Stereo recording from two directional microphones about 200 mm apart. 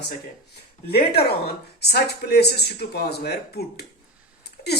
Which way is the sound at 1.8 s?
55° left (ahead or behind).